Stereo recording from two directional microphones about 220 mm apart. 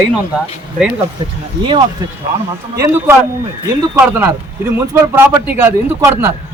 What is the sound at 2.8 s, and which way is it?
Speech, 10° right (ahead or behind).